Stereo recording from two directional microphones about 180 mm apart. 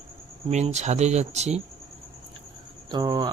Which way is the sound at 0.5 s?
40° right (ahead or behind).